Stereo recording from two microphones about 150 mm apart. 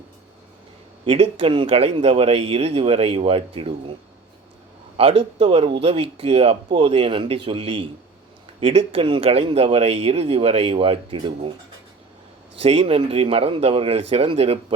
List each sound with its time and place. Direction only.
1.0 s speech: 40° right (ahead or behind)
4.9 s speech: 40° right (ahead or behind)
12.5 s speech: 40° right (ahead or behind)